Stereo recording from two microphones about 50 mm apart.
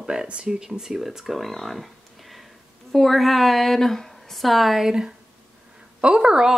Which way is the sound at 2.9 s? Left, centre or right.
Centre.